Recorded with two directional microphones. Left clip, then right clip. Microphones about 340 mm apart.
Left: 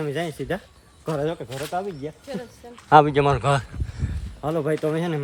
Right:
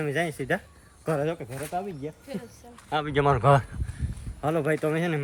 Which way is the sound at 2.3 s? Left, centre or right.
Centre.